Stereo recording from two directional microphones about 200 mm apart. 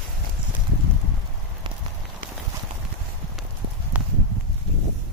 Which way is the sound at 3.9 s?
10° right (ahead or behind).